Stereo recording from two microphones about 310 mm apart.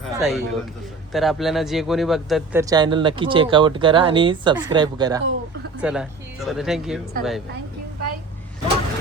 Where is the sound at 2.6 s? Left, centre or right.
Centre.